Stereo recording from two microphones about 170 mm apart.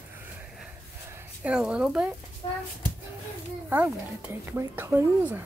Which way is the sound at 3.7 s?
10° right (ahead or behind).